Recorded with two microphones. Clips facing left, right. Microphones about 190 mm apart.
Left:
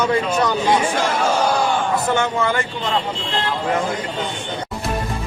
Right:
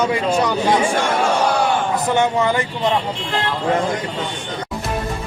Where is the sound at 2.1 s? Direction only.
20° right (ahead or behind).